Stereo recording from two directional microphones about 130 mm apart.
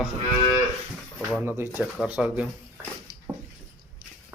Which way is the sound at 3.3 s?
25° right (ahead or behind).